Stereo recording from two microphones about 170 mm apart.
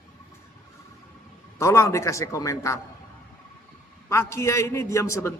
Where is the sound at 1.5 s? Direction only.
15° left (ahead or behind).